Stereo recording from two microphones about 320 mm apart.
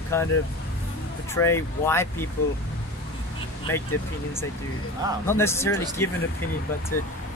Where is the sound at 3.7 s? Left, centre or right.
Centre.